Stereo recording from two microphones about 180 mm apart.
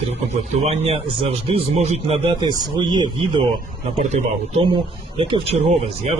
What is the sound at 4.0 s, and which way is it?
Speech, 40° right (ahead or behind).